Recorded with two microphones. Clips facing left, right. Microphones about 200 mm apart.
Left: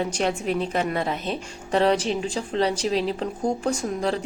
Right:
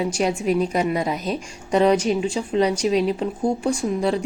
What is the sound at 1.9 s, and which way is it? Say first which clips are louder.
Speech: right 4 dB; 30° left (ahead or behind).